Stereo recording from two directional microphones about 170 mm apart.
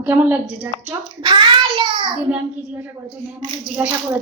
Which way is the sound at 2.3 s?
10° right (ahead or behind).